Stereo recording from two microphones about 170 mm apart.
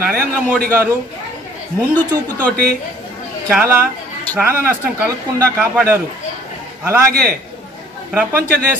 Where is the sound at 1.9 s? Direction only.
10° left (ahead or behind).